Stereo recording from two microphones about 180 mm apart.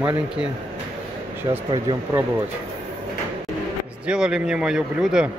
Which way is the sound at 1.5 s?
20° right (ahead or behind).